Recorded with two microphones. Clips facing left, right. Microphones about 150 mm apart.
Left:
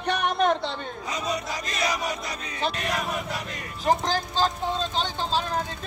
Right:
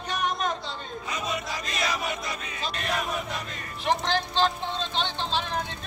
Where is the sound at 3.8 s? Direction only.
40° left (ahead or behind).